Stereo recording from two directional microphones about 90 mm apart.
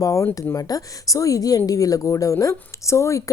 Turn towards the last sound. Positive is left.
turn(degrees=35)  # may be behind; listen again after turning